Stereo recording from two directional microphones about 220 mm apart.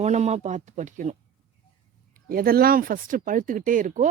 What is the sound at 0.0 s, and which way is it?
Speech, 30° right (ahead or behind).